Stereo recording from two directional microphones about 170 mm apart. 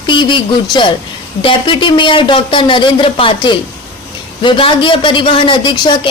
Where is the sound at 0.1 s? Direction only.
30° left (ahead or behind).